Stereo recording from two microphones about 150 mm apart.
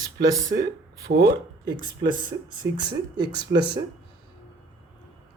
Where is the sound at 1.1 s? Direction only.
90° right.